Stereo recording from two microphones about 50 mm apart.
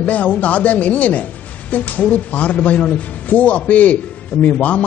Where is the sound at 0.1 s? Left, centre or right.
Left.